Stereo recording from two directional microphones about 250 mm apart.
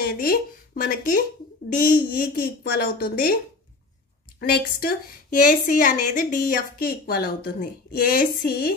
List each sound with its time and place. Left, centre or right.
0.0 s a woman's voice: left
4.4 s a woman's voice: left